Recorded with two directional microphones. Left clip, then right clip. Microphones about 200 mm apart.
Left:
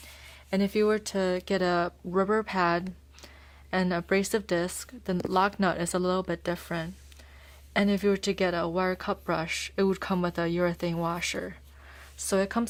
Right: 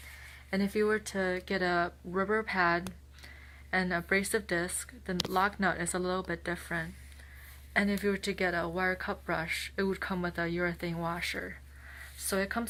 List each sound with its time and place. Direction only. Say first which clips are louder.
0.5 s speech: left 4 dB; 50° left (ahead or behind)